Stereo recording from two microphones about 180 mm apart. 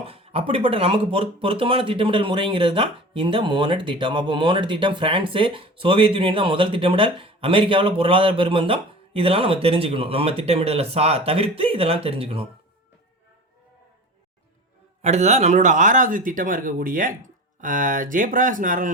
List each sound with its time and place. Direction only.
0.0 s speech: 30° right (ahead or behind)
15.0 s speech: 40° right (ahead or behind)